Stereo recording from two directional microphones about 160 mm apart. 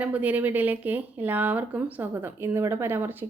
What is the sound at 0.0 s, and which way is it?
Speech, 10° right (ahead or behind).